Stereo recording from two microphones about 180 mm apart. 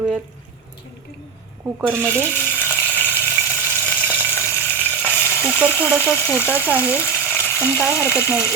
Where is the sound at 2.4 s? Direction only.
10° left (ahead or behind).